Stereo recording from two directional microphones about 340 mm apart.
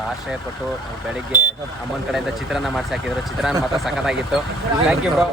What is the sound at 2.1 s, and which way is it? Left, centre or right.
Speech, centre.